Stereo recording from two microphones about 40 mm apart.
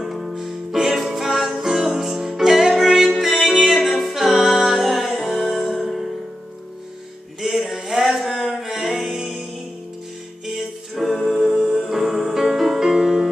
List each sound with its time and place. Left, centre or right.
0.0 s music: centre
7.4 s music: centre
8.2 s a sound: centre
8.5 s music: centre
10.5 s music: centre
11.1 s music: centre
11.9 s music: centre